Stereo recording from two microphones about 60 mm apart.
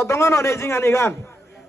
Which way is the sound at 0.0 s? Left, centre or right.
Left.